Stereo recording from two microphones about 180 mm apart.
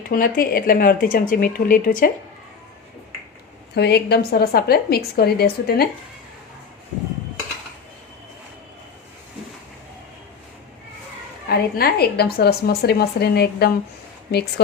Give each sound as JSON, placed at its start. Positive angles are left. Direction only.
{"t": 0.1, "sound": "speech", "side_deg": 50}
{"t": 3.8, "sound": "a woman's voice", "side_deg": 65}
{"t": 11.4, "sound": "a woman's voice", "side_deg": 60}